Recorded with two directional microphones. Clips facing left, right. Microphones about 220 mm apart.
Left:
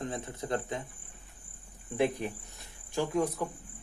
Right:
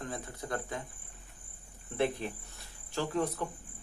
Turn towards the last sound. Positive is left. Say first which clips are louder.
# left 3 dB
turn(degrees=10)  # may be behind; listen again after turning